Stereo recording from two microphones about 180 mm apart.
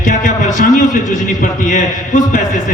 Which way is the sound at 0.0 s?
45° left (ahead or behind).